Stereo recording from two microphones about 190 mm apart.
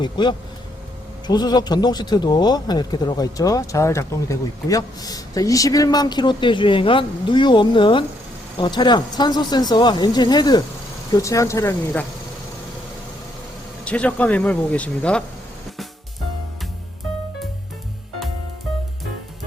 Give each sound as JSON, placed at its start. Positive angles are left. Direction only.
{"t": 0.0, "sound": "speech", "side_deg": 25}
{"t": 13.8, "sound": "speech", "side_deg": 5}